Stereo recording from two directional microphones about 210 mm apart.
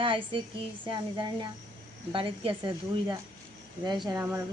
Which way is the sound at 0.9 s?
20° right (ahead or behind).